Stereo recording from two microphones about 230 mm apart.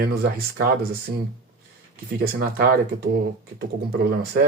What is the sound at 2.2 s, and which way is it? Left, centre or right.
Speech, right.